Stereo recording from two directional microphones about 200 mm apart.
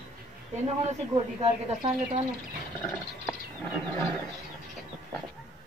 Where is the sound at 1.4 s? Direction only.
30° right (ahead or behind).